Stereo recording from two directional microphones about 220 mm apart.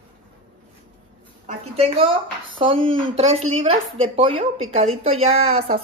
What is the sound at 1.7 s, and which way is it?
Speech, 25° right (ahead or behind).